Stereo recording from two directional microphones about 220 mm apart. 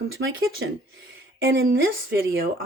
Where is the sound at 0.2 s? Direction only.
60° right (ahead or behind).